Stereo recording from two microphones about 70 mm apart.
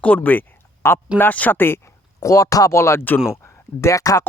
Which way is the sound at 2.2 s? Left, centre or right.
Left.